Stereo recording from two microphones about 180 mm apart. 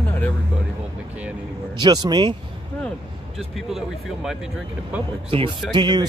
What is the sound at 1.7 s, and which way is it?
Speech, 25° right (ahead or behind).